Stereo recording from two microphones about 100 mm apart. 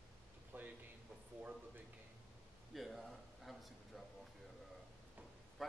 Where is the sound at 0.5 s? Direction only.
20° right (ahead or behind).